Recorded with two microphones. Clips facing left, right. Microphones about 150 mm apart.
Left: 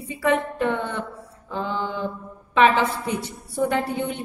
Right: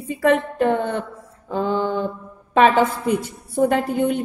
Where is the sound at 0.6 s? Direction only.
45° right (ahead or behind).